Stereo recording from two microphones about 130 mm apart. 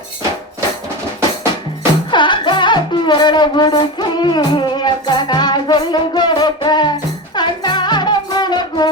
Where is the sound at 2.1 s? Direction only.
35° left (ahead or behind).